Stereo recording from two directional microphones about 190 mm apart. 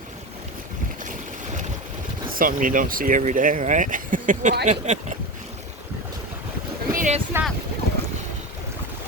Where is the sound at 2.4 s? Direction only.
45° right (ahead or behind).